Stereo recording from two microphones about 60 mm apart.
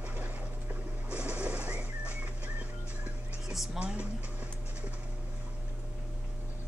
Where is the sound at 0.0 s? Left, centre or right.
Right.